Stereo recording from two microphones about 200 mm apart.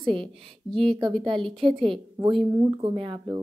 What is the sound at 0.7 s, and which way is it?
Speech, 5° left (ahead or behind).